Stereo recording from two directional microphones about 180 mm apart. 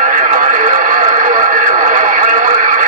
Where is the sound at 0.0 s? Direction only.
45° right (ahead or behind).